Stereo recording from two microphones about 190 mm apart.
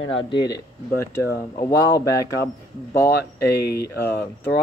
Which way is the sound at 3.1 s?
55° left (ahead or behind).